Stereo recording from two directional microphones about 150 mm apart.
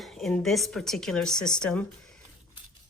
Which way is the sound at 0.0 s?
Centre (ahead or behind).